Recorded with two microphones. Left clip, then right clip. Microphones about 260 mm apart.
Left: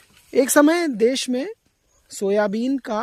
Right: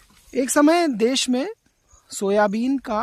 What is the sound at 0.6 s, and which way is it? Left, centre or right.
Speech, centre.